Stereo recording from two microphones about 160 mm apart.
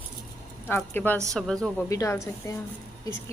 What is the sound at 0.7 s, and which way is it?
A woman's voice, 10° left (ahead or behind).